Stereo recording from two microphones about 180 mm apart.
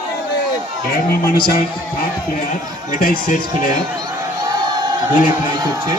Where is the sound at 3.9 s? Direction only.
20° right (ahead or behind).